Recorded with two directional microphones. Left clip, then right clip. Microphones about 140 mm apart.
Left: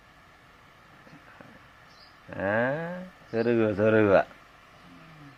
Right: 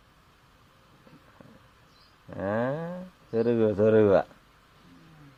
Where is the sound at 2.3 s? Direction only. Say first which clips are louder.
Left 2 dB; 25° right (ahead or behind).